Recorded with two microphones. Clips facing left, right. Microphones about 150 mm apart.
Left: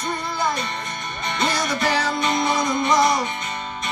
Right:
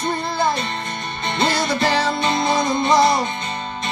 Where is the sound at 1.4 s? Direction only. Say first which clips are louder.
Right 3 dB; 30° right (ahead or behind).